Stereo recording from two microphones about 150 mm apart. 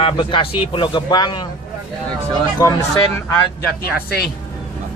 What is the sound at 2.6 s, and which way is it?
Speech, 20° left (ahead or behind).